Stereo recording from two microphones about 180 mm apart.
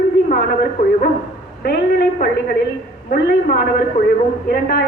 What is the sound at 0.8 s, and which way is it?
A woman's voice, 55° left (ahead or behind).